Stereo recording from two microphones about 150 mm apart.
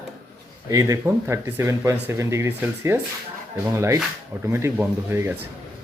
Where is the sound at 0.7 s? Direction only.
20° right (ahead or behind).